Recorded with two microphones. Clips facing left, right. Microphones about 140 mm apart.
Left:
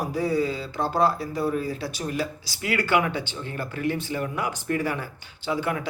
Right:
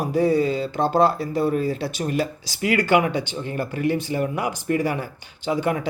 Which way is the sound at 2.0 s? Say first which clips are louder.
Right 5 dB; 65° right (ahead or behind).